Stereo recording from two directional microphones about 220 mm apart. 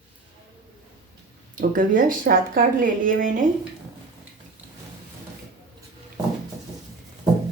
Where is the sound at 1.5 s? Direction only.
35° right (ahead or behind).